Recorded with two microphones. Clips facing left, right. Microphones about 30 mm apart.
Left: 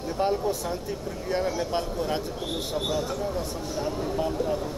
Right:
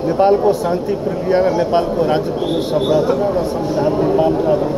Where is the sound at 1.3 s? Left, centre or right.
Right.